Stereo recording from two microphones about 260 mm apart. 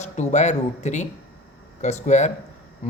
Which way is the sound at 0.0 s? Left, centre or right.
Left.